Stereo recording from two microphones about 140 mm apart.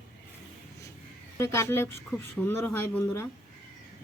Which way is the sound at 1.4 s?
20° left (ahead or behind).